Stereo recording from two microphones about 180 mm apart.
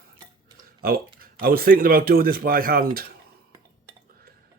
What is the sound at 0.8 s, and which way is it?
Speech, 55° right (ahead or behind).